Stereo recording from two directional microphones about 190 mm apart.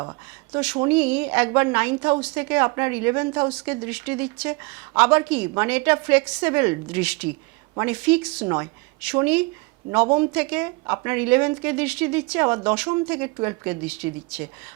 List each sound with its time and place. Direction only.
0.5 s a woman's voice: 5° right (ahead or behind)